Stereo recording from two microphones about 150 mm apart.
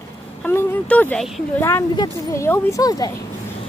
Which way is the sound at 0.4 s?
15° left (ahead or behind).